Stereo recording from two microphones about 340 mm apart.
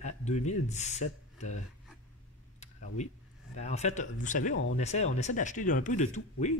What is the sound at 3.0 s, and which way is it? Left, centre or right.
Speech, centre.